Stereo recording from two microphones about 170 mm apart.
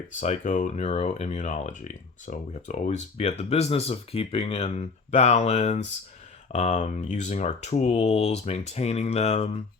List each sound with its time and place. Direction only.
0.2 s speech: 45° left (ahead or behind)